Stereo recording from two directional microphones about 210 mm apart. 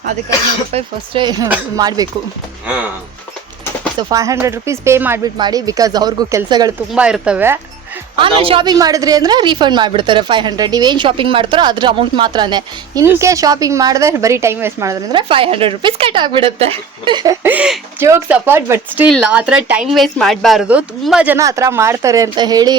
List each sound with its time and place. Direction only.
0.7 s a woman's voice: 25° right (ahead or behind)
4.1 s speech: 15° right (ahead or behind)
6.9 s speech: 5° right (ahead or behind)
8.1 s a woman's voice: 25° right (ahead or behind)
17.4 s speech: 5° right (ahead or behind)